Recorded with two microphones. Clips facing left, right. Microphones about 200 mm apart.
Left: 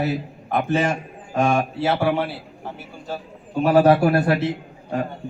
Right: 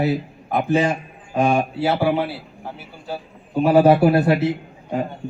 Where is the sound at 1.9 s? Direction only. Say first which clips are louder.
Right 1 dB; 5° right (ahead or behind).